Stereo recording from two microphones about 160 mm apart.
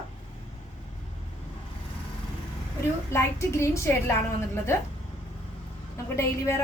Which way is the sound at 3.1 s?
15° left (ahead or behind).